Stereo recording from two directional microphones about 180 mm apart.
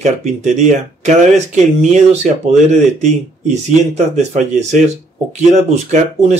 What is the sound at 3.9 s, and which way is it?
Speech, 40° right (ahead or behind).